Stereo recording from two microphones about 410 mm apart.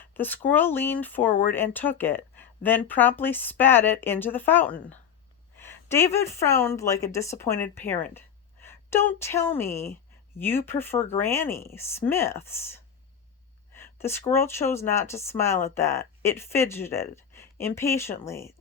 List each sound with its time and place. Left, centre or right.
0.0 s a woman's voice: centre